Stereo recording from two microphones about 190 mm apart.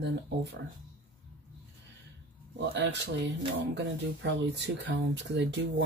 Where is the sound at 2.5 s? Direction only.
65° right (ahead or behind).